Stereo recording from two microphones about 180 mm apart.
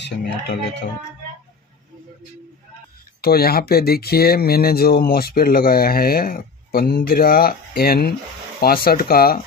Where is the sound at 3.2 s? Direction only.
60° left (ahead or behind).